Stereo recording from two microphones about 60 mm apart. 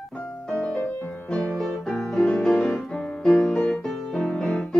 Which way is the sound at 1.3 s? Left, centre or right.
Centre.